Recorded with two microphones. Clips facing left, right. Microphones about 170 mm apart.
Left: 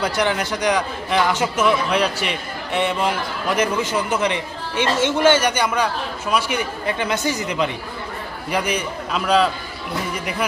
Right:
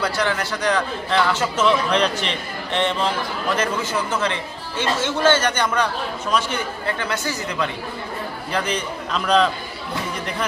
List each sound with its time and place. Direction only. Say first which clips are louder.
0.0 s a man's voice: left 2 dB; 20° left (ahead or behind)